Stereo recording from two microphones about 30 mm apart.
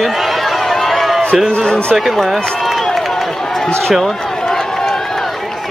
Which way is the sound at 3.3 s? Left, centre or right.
Centre.